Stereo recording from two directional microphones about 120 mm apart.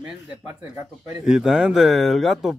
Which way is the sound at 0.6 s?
25° right (ahead or behind).